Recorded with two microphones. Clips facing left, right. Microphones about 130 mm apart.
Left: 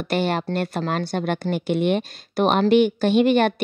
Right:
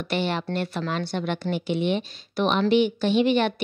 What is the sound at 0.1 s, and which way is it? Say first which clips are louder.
A woman's voice: left 4 dB; 45° left (ahead or behind).